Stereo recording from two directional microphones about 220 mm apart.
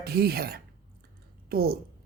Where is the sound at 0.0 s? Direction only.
45° right (ahead or behind).